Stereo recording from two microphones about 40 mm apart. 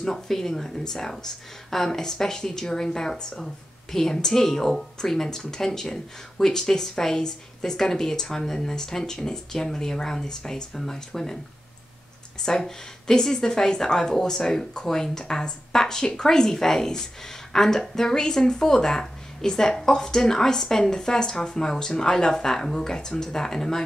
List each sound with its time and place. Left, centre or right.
0.0 s a woman's voice: centre
12.4 s a woman's voice: centre